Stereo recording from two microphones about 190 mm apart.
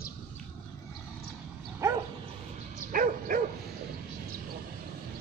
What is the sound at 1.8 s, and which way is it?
Dog, 15° right (ahead or behind).